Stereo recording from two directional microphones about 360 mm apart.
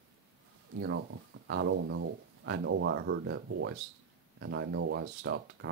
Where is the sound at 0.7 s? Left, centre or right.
Right.